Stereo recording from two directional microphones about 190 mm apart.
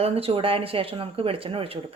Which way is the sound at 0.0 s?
30° right (ahead or behind).